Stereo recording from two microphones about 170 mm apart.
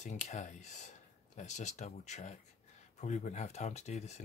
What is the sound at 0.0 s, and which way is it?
Speech, 45° left (ahead or behind).